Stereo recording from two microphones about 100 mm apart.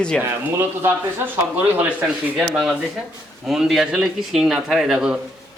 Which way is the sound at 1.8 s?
15° right (ahead or behind).